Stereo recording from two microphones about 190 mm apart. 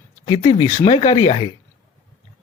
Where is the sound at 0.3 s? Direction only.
30° left (ahead or behind).